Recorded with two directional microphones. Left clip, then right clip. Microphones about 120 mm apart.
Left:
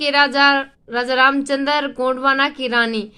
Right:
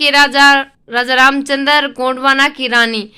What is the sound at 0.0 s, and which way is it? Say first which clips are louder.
Speech: right 6 dB; 20° right (ahead or behind).